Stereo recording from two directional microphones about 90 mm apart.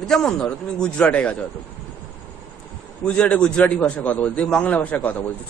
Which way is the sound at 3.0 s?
10° left (ahead or behind).